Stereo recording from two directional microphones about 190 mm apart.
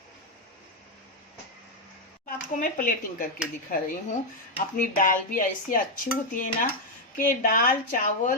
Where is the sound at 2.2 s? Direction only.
45° left (ahead or behind).